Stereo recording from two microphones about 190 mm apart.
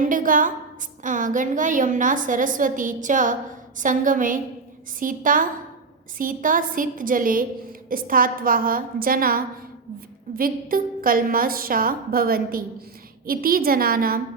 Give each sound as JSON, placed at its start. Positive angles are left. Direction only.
{"t": 0.0, "sound": "a woman's voice", "side_deg": -45}